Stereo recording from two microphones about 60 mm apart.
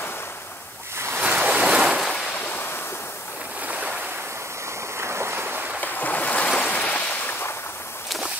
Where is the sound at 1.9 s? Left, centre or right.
Centre.